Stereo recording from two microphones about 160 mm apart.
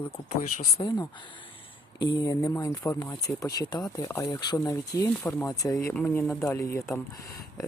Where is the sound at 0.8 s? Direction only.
30° left (ahead or behind).